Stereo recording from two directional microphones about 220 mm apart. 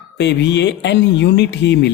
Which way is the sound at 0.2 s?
50° left (ahead or behind).